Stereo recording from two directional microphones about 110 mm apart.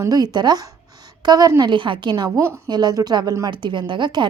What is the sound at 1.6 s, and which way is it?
Speech, 45° right (ahead or behind).